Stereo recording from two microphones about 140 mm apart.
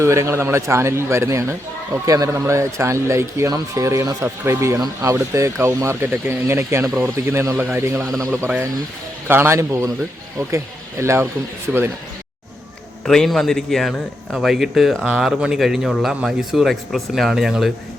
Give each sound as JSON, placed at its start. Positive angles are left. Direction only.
{"t": 0.0, "sound": "speech", "side_deg": -20}
{"t": 11.0, "sound": "speech", "side_deg": -20}
{"t": 11.7, "sound": "a man's voice", "side_deg": -5}
{"t": 13.1, "sound": "a man's voice", "side_deg": 5}